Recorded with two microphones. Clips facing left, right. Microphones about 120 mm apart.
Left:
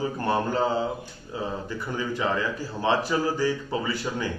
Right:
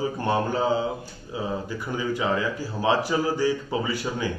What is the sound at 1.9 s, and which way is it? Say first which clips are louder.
A man's voice: right 2 dB; 15° right (ahead or behind).